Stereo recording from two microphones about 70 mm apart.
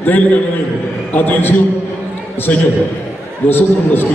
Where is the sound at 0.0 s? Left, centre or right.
Left.